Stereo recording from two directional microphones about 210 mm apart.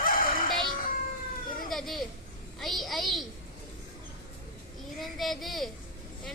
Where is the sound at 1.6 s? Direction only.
Centre (ahead or behind).